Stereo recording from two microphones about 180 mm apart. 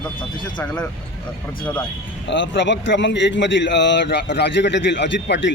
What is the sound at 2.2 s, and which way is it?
A man's voice, 90° left.